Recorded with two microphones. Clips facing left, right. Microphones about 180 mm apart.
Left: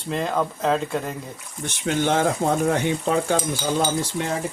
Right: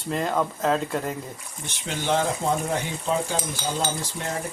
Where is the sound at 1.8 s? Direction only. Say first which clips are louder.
Left 4 dB; 55° left (ahead or behind).